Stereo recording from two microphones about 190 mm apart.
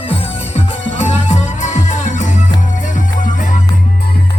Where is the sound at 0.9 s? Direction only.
40° left (ahead or behind).